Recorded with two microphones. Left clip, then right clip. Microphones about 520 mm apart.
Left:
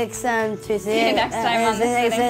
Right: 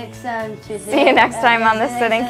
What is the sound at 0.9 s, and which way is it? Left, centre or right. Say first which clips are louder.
Speech: right 8 dB; right.